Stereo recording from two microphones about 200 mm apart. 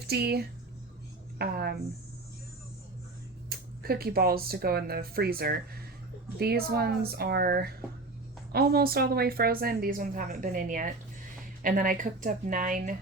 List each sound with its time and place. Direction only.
0.0 s a woman's voice: 55° right (ahead or behind)
3.5 s a woman's voice: 50° right (ahead or behind)